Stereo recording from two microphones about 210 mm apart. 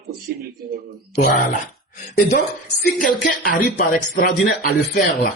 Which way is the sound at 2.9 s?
40° left (ahead or behind).